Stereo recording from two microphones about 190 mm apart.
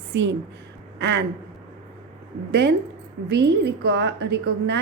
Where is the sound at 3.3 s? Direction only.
65° right (ahead or behind).